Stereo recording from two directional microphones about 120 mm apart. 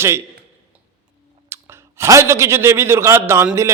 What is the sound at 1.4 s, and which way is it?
Speech, 20° right (ahead or behind).